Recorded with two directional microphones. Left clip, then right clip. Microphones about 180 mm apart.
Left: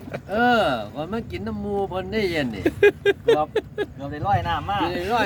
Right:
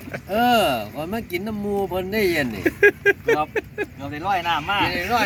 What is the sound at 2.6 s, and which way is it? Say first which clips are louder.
Speech: right 1 dB; 10° left (ahead or behind).